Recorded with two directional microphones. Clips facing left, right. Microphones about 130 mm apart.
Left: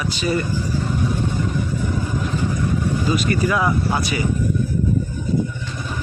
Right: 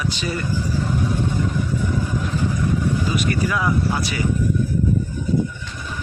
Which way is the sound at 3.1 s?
30° left (ahead or behind).